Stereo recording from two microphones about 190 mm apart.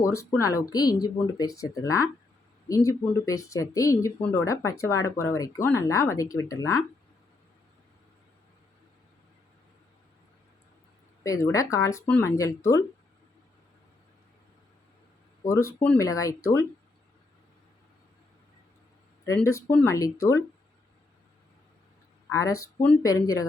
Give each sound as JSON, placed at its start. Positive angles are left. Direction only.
{"t": 0.0, "sound": "speech", "side_deg": 15}
{"t": 11.2, "sound": "speech", "side_deg": 15}
{"t": 15.4, "sound": "speech", "side_deg": 15}
{"t": 19.2, "sound": "speech", "side_deg": 15}
{"t": 22.3, "sound": "speech", "side_deg": 15}